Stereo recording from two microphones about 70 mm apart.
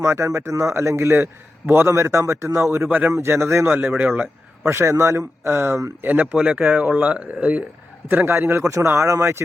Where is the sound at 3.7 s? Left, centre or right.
Right.